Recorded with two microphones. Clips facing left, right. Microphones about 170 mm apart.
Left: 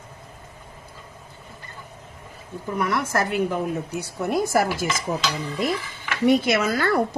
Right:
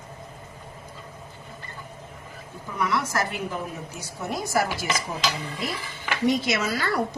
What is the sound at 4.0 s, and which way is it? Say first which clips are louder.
Dishes: left 6 dB; 55° left (ahead or behind).